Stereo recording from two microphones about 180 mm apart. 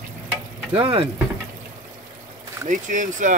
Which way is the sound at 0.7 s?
30° right (ahead or behind).